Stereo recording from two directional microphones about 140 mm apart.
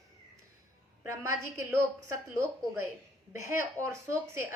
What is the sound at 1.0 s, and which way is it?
A woman's voice, 20° right (ahead or behind).